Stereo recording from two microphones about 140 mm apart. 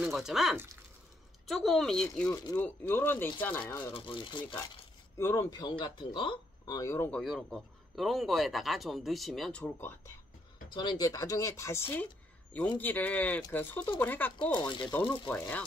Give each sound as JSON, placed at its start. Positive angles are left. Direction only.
{"t": 0.0, "sound": "speech", "side_deg": -5}
{"t": 2.3, "sound": "speech", "side_deg": 25}
{"t": 2.6, "sound": "speech", "side_deg": 15}
{"t": 3.9, "sound": "speech", "side_deg": 40}
{"t": 5.1, "sound": "speech", "side_deg": 20}
{"t": 7.1, "sound": "speech", "side_deg": 5}
{"t": 10.7, "sound": "speech", "side_deg": 35}
{"t": 14.5, "sound": "speech", "side_deg": 30}
{"t": 15.2, "sound": "speech", "side_deg": 15}